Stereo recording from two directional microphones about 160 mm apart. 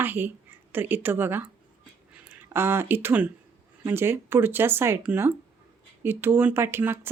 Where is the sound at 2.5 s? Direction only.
15° right (ahead or behind).